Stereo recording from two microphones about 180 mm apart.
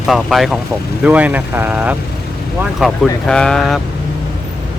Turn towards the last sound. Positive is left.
turn(degrees=0)  # may be behind; listen again after turning